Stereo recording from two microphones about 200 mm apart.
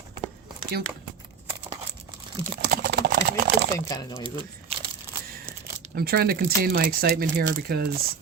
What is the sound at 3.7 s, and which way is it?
Speech, 20° left (ahead or behind).